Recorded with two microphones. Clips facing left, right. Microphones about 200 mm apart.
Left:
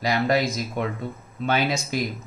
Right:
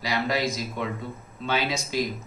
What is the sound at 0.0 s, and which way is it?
Speech, 50° left (ahead or behind).